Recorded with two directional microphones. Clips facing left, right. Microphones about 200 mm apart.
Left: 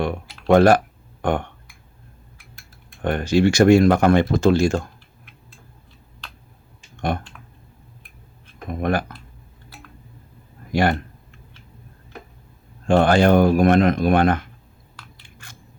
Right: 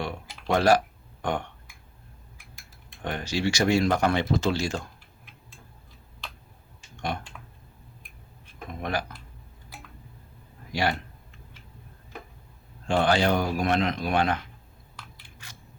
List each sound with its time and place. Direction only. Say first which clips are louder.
0.0 s speech: left 9 dB; 55° left (ahead or behind)
3.0 s speech: left 10 dB; 55° left (ahead or behind)
8.8 s speech: left 8 dB; 50° left (ahead or behind)
10.7 s a sound: left 7 dB; 50° left (ahead or behind)
12.9 s speech: left 8 dB; 50° left (ahead or behind)
15.4 s a sound: left 2 dB; 50° left (ahead or behind)